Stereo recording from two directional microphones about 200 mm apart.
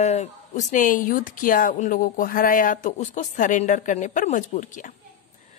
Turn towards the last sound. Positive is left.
turn(degrees=40)  # may be behind; listen again after turning